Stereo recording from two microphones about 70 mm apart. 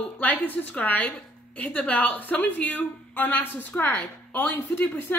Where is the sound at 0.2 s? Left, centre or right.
Left.